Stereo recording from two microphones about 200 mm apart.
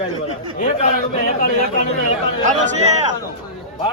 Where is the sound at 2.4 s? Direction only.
35° right (ahead or behind).